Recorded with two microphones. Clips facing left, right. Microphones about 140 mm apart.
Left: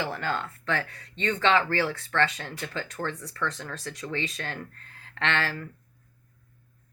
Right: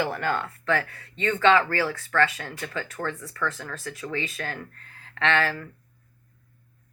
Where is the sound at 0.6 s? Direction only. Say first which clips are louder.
Right 4 dB; 20° left (ahead or behind).